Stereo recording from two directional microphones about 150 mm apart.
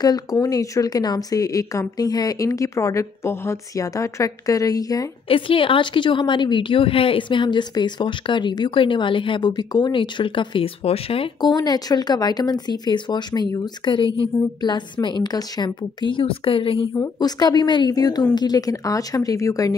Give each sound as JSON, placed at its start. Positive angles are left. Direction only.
{"t": 0.0, "sound": "a woman's voice", "side_deg": 25}
{"t": 5.3, "sound": "a woman's voice", "side_deg": 35}
{"t": 16.9, "sound": "a woman's voice", "side_deg": 25}